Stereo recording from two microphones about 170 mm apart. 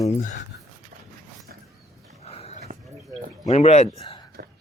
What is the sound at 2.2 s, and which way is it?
Dog, 40° left (ahead or behind).